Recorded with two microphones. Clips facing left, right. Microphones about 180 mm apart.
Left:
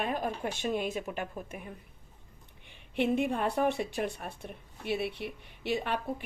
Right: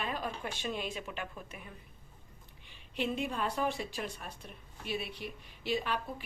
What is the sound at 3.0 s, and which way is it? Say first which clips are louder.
A woman's voice: left 6 dB; 60° left (ahead or behind).